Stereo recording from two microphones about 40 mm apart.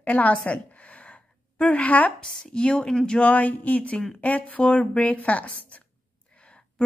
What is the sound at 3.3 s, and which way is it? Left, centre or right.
A woman's voice, left.